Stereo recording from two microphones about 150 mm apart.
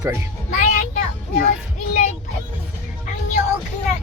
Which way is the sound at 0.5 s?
55° left (ahead or behind).